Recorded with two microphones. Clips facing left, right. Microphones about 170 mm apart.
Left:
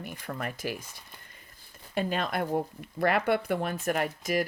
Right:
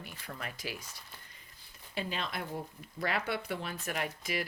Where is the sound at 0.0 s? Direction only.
50° left (ahead or behind).